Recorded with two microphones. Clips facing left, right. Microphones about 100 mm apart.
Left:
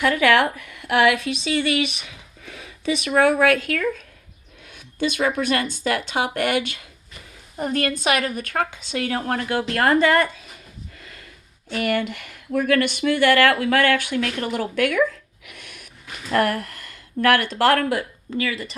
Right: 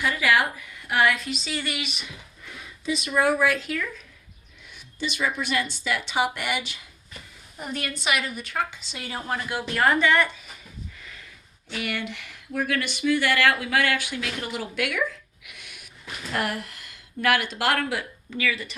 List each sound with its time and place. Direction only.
0.0 s a woman's voice: 65° left (ahead or behind); by 10.2 s 45° left (ahead or behind)
11.7 s speech: 45° left (ahead or behind)
15.4 s dog: 50° left (ahead or behind)
16.3 s speech: 45° left (ahead or behind)